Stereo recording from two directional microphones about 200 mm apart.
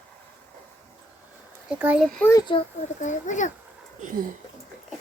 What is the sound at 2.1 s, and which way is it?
Speech, 10° left (ahead or behind).